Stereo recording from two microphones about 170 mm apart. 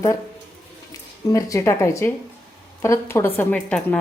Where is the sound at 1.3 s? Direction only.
20° left (ahead or behind).